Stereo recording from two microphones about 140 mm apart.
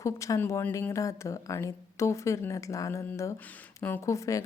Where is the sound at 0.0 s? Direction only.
20° left (ahead or behind).